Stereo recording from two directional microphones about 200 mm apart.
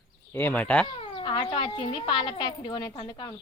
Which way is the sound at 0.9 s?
25° left (ahead or behind).